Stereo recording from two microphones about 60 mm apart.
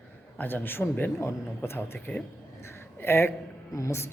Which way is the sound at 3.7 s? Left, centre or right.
Left.